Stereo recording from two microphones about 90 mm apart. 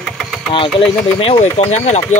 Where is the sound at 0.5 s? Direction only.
85° left.